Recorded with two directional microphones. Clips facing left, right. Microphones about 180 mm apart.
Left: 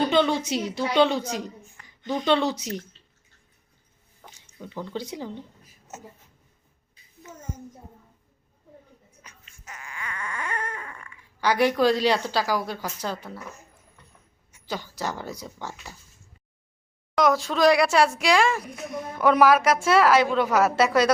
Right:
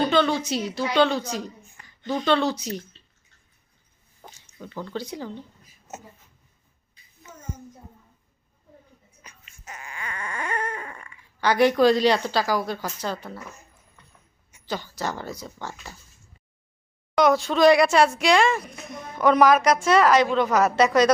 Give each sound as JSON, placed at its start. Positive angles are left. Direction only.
{"t": 0.1, "sound": "a woman's voice", "side_deg": 20}
{"t": 4.6, "sound": "a woman's voice", "side_deg": 15}
{"t": 9.2, "sound": "a sound", "side_deg": -25}
{"t": 11.3, "sound": "a woman's voice", "side_deg": 10}
{"t": 14.7, "sound": "a woman's voice", "side_deg": 10}
{"t": 17.2, "sound": "a woman's voice", "side_deg": 0}